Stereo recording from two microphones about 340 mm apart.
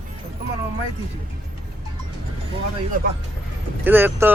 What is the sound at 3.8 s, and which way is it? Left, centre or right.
Speech, centre.